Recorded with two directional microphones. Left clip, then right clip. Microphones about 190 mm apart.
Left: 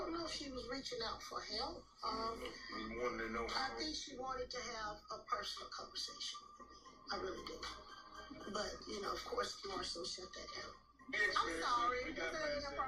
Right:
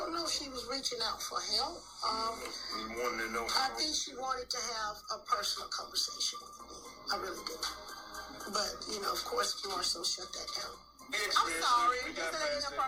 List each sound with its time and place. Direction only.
0.0 s a sound: 20° right (ahead or behind)
0.5 s speech: 20° right (ahead or behind)
7.1 s speech: 20° right (ahead or behind)